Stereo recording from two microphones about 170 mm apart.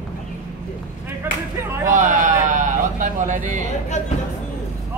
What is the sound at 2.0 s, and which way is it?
Sheep, 50° right (ahead or behind).